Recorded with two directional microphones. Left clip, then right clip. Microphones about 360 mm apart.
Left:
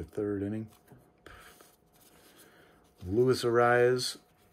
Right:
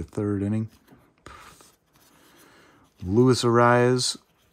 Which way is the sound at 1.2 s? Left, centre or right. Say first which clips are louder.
Right 7 dB; centre.